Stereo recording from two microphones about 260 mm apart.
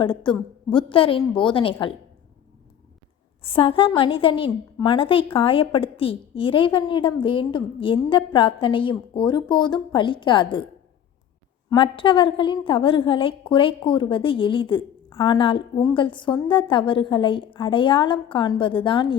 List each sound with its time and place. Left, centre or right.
0.0 s a woman's voice: centre
3.4 s a woman's voice: left
11.7 s a woman's voice: centre